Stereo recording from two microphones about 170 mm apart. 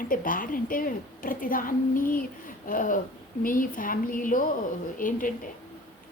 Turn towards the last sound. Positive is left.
turn(degrees=50)  # may be behind; listen again after turning